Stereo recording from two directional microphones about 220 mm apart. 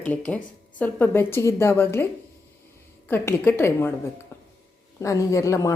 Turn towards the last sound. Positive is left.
turn(degrees=15)  # may be behind; listen again after turning